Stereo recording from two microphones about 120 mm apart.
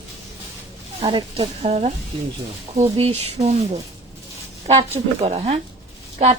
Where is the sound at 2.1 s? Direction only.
50° right (ahead or behind).